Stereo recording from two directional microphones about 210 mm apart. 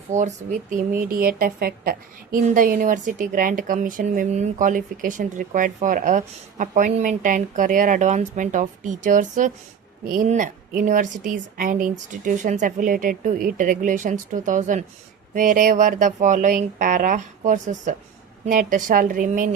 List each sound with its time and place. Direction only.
0.1 s speech: 35° right (ahead or behind)